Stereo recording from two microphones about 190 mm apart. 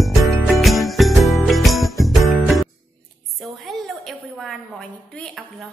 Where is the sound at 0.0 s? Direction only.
Centre (ahead or behind).